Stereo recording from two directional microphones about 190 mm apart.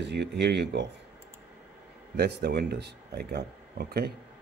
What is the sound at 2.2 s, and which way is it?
Speech, 55° right (ahead or behind).